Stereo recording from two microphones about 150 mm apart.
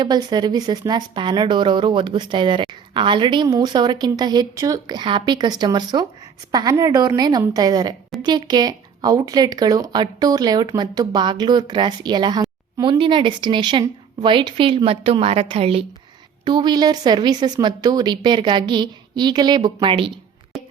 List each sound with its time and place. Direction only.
0.0 s a woman's voice: 30° right (ahead or behind)